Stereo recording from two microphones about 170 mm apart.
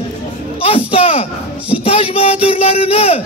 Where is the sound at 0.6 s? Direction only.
35° left (ahead or behind).